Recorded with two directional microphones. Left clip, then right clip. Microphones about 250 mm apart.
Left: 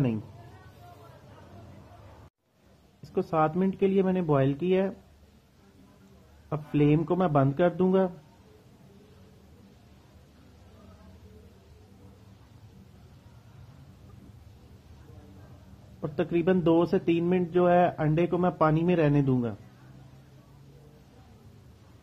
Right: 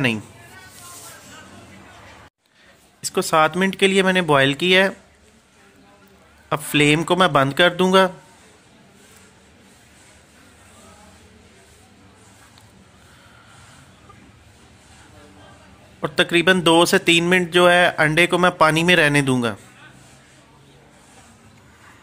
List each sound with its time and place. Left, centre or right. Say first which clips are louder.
3.1 s speech: right 9 dB; right
3.3 s speech: right 10 dB; centre
6.5 s speech: right 9 dB; centre
16.0 s speech: right 11 dB; centre
18.3 s speech: right 10 dB; right
18.8 s speech: right 10 dB; centre
19.2 s a man's voice: right 8 dB; right